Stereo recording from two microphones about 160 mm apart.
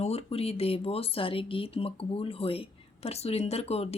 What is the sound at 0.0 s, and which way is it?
Speech, 40° left (ahead or behind).